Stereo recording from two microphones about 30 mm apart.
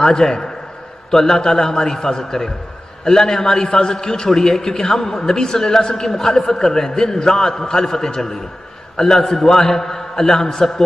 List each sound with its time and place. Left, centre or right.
0.0 s a man's voice: left